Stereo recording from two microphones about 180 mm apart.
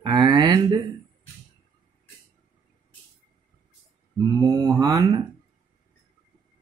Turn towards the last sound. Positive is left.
turn(degrees=-20)  # may be behind; listen again after turning